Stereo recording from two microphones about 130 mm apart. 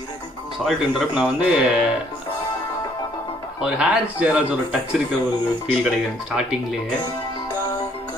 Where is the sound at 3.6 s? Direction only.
5° right (ahead or behind).